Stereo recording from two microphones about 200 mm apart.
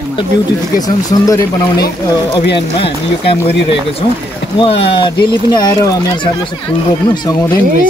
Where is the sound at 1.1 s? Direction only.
15° left (ahead or behind).